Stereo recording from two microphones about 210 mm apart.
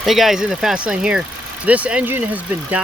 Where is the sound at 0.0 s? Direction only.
Centre (ahead or behind).